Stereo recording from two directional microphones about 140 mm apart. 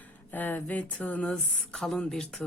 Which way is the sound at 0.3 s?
15° left (ahead or behind).